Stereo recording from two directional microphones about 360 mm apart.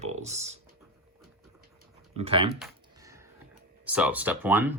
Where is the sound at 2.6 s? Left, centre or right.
Centre.